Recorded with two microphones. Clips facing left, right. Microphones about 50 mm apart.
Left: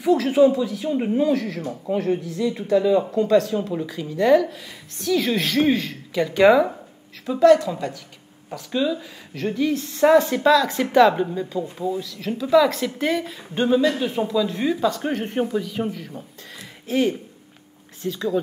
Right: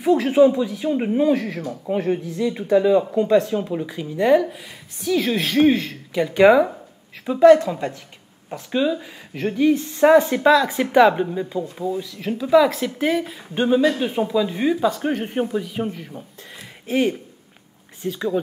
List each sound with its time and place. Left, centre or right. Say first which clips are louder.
0.2 s a woman's voice: right 1 dB; centre
5.5 s speech: right 5 dB; right
6.1 s a woman's voice: right 1 dB; centre